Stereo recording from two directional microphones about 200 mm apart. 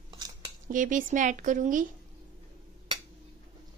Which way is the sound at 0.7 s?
40° right (ahead or behind).